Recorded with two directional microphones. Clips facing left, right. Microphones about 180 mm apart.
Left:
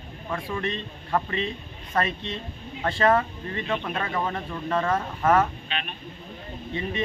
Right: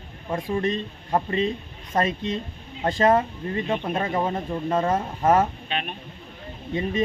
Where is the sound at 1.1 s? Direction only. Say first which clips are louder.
Right 2 dB; 25° right (ahead or behind).